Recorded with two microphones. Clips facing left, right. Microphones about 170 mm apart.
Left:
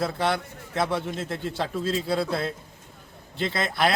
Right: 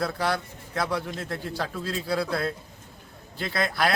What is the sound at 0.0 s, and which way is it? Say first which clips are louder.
A man's voice: left 1 dB; 25° left (ahead or behind).